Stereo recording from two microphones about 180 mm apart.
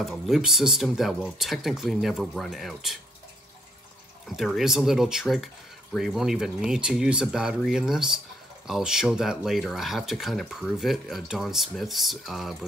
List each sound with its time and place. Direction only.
0.0 s speech: centre (ahead or behind)
4.4 s speech: centre (ahead or behind)